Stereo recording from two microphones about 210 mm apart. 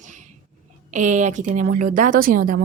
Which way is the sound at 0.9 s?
35° right (ahead or behind).